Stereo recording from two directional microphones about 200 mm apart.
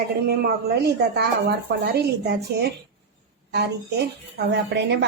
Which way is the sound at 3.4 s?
55° right (ahead or behind).